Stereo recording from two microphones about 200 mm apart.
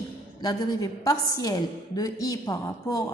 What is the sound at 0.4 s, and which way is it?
A woman's voice, 20° left (ahead or behind).